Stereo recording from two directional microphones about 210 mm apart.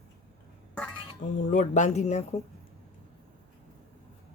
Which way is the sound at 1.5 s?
35° left (ahead or behind).